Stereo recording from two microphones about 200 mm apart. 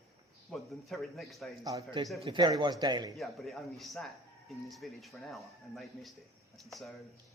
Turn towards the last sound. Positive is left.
turn(degrees=0)  # may be behind; listen again after turning